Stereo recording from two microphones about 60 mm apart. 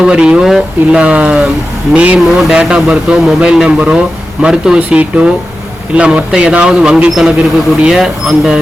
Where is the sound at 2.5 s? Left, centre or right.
Centre.